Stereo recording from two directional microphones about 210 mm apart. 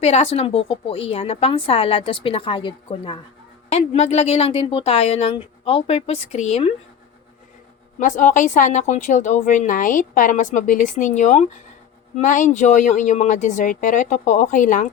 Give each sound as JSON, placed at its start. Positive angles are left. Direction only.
{"t": 0.0, "sound": "a woman's voice", "side_deg": 30}
{"t": 7.9, "sound": "speech", "side_deg": 35}